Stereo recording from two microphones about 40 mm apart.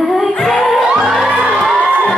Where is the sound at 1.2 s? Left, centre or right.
Right.